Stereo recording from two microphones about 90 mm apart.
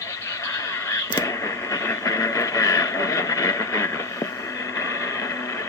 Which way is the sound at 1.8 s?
35° left (ahead or behind).